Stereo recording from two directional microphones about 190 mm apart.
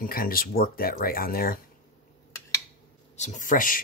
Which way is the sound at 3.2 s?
40° left (ahead or behind).